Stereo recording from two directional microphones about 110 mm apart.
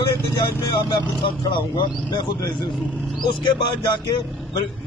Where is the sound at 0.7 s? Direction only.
40° left (ahead or behind).